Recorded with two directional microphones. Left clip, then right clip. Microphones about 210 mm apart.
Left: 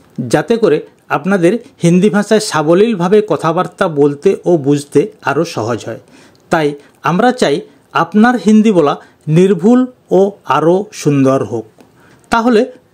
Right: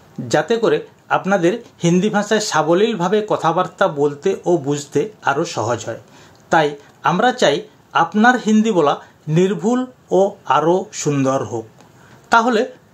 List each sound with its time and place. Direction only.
0.3 s speech: 45° left (ahead or behind)